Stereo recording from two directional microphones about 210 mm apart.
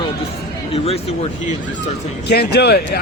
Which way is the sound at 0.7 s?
30° left (ahead or behind).